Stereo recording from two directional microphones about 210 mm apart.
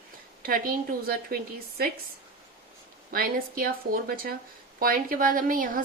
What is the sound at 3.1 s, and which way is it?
A woman's voice, 45° right (ahead or behind).